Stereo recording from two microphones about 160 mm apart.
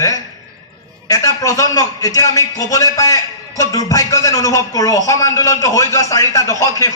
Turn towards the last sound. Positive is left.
turn(degrees=20)  # may be behind; listen again after turning